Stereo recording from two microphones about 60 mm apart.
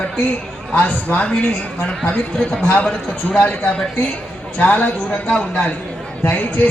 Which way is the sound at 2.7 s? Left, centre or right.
Left.